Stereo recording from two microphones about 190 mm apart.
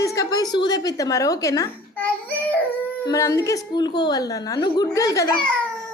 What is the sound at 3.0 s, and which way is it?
A woman's voice, 20° left (ahead or behind).